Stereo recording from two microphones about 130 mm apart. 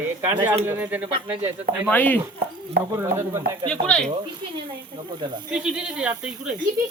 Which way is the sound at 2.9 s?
20° right (ahead or behind).